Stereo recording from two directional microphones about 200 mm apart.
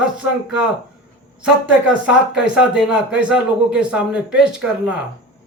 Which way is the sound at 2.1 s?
5° right (ahead or behind).